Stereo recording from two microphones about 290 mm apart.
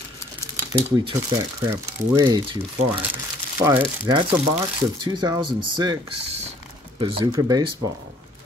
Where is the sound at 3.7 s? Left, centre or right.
Centre.